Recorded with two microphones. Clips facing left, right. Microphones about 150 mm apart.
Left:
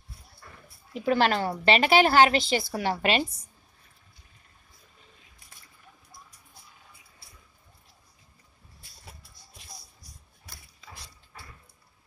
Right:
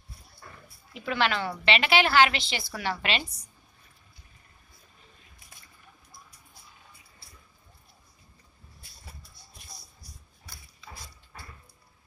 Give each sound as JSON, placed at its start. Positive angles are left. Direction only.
{"t": 0.9, "sound": "a woman's voice", "side_deg": 40}